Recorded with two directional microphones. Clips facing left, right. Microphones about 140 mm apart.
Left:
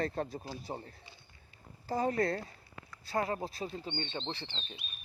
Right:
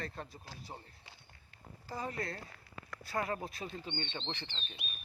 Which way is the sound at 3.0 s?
30° left (ahead or behind).